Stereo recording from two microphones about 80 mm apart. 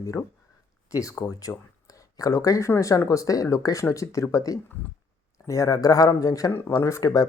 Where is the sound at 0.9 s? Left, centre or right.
Left.